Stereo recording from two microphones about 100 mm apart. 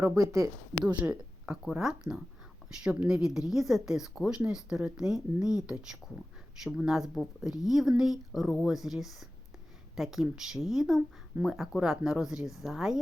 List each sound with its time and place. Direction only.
0.2 s speech: 30° right (ahead or behind)
0.9 s a woman's voice: 15° right (ahead or behind)